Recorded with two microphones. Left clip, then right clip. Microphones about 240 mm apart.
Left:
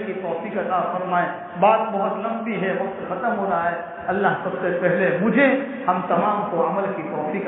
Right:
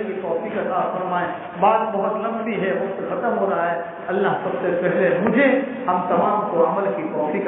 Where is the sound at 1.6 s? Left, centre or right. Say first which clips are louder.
Even; left.